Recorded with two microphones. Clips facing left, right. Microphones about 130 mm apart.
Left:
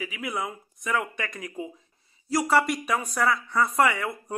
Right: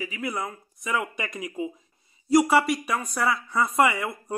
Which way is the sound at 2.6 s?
Centre (ahead or behind).